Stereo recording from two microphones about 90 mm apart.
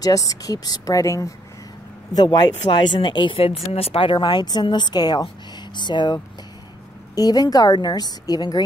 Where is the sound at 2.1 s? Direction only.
50° left (ahead or behind).